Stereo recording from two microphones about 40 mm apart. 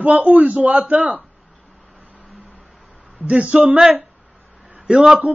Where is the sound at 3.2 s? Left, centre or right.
Right.